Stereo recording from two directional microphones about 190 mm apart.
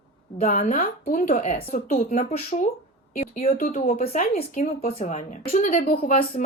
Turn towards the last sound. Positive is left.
turn(degrees=30)  # may be behind; listen again after turning